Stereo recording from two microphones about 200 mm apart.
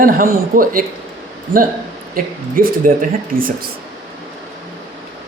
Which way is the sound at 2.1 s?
45° right (ahead or behind).